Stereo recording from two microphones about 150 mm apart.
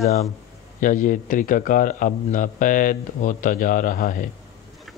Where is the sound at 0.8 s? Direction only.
60° left (ahead or behind).